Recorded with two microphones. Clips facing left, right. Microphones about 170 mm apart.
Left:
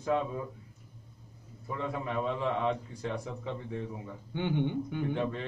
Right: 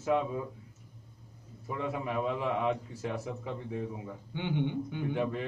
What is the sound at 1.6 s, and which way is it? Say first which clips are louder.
A man's voice: right 1 dB; 5° right (ahead or behind).